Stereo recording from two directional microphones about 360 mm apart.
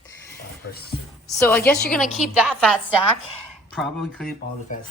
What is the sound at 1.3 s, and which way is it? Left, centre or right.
Speech, centre.